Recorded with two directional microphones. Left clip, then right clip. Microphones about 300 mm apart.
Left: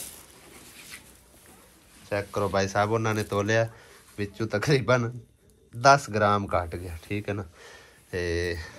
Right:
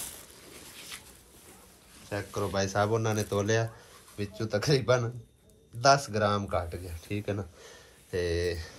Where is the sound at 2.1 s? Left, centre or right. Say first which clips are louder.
Left 6 dB; centre.